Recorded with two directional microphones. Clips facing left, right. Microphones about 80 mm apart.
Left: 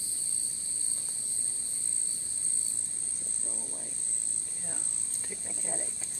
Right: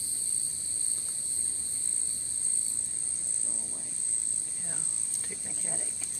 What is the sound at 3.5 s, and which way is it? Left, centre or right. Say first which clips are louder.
Cricket: left 3 dB; centre.